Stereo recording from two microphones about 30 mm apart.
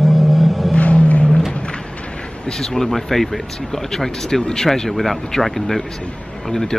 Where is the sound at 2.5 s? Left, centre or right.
Centre.